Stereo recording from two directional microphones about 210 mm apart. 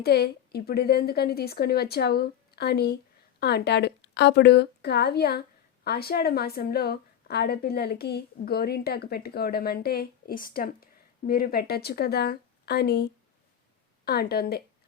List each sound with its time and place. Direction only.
0.0 s a woman's voice: 50° left (ahead or behind)